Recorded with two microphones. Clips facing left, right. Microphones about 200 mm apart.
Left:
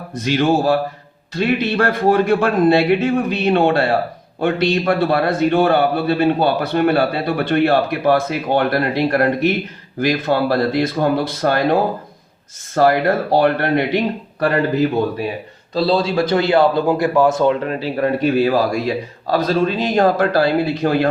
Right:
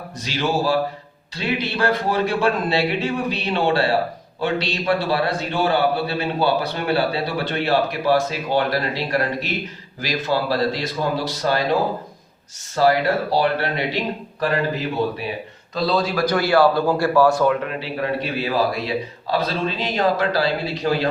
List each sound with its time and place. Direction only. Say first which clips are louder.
0.2 s a man's voice: left 6 dB; 55° left (ahead or behind)
15.7 s a man's voice: left 4 dB; 30° left (ahead or behind)
17.6 s speech: left 6 dB; 40° left (ahead or behind)